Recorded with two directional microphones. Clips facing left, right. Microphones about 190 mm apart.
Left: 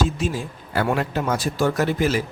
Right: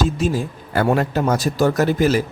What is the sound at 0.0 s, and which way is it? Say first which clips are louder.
A man's voice: right 4 dB; 40° right (ahead or behind).